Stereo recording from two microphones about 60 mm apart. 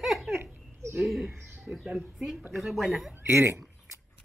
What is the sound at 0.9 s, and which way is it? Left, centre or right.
A woman's voice, centre.